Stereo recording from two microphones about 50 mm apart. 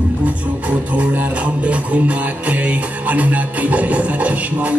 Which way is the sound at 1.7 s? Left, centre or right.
Right.